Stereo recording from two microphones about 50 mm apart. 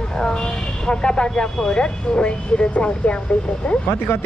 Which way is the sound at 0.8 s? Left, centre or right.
Centre.